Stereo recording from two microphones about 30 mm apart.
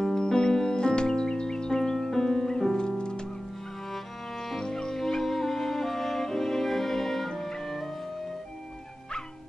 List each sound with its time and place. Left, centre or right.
0.3 s music: centre
3.0 s music: left
4.4 s music: centre
4.9 s music: centre